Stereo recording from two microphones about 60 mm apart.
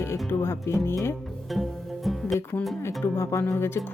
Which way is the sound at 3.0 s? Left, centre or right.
Left.